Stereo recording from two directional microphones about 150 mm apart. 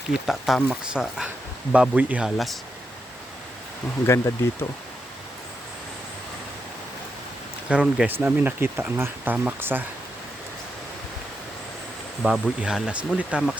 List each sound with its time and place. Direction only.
0.3 s speech: centre (ahead or behind)
4.0 s speech: 20° left (ahead or behind)
7.7 s speech: 5° right (ahead or behind)
12.2 s speech: 5° right (ahead or behind)